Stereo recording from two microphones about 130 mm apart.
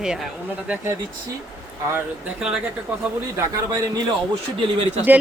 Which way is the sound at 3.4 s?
25° right (ahead or behind).